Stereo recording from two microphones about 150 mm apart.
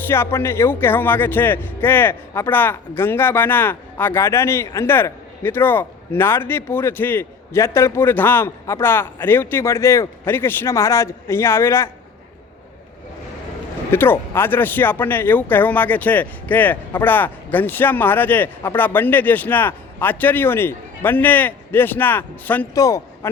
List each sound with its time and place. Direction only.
0.1 s a man's voice: 15° left (ahead or behind)
13.9 s a man's voice: 15° left (ahead or behind)
22.7 s a man's voice: 20° left (ahead or behind)